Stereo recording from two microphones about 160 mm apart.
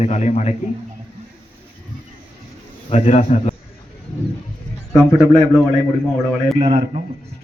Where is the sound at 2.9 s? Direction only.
45° left (ahead or behind).